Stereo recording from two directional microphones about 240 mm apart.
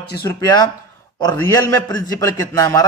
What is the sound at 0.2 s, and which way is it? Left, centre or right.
Speech, centre.